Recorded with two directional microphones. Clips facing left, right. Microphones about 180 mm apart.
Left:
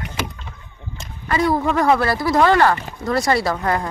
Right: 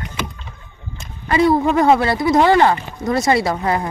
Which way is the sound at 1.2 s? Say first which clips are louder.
Right 4 dB; 25° right (ahead or behind).